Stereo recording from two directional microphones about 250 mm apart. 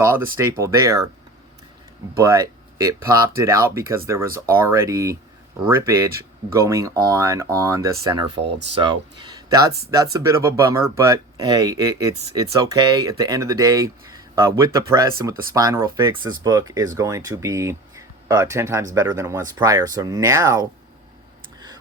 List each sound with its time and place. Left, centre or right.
0.0 s speech: centre
2.1 s speech: centre
8.4 s speech: right
8.8 s speech: centre